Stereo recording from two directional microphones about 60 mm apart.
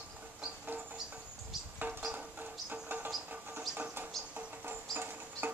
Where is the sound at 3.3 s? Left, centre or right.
Right.